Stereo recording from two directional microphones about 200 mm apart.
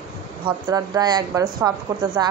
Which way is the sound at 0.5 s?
20° right (ahead or behind).